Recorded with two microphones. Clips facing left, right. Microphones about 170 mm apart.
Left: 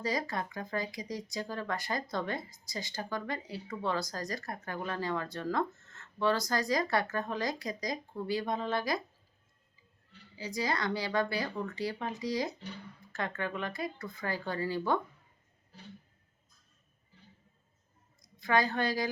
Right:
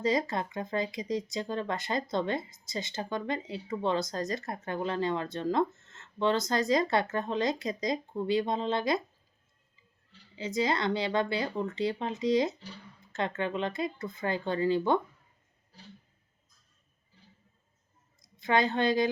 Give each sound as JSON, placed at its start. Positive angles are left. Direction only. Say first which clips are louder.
{"t": 0.0, "sound": "speech", "louder": "right 5 dB", "side_deg": -25}
{"t": 10.1, "sound": "speech", "louder": "right 5 dB", "side_deg": -25}
{"t": 18.2, "sound": "a woman's voice", "louder": "right 2 dB", "side_deg": -20}